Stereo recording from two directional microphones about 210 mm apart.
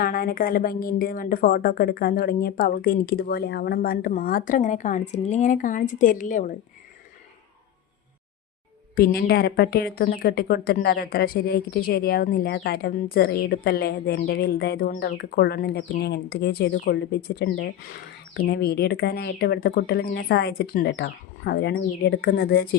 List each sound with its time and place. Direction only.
0.0 s a woman's voice: 45° left (ahead or behind)
9.0 s a woman's voice: 45° left (ahead or behind)